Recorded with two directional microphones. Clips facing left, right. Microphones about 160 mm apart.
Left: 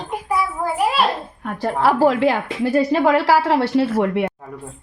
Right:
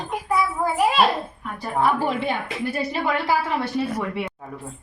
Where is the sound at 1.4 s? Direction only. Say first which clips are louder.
Left 4 dB; 85° left.